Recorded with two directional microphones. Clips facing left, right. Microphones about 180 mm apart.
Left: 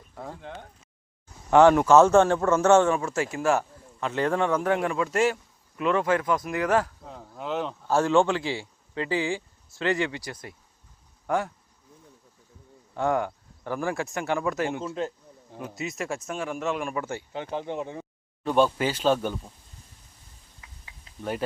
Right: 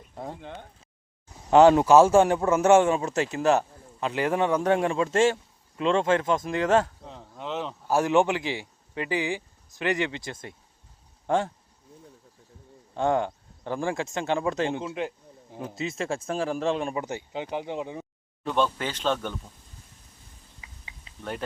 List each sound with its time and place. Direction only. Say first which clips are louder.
0.1 s speech: right 2 dB; 20° right (ahead or behind)
1.5 s a man's voice: right 1 dB; 20° right (ahead or behind)
7.0 s speech: left 1 dB; 5° left (ahead or behind)
7.9 s a man's voice: even; 15° right (ahead or behind)
12.9 s a man's voice: right 1 dB; 25° right (ahead or behind)
15.5 s a man's voice: right 2 dB; 25° right (ahead or behind)
18.5 s speech: left 4 dB; 10° left (ahead or behind)